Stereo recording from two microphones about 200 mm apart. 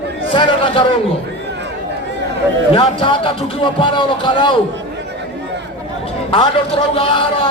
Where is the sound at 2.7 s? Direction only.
25° left (ahead or behind).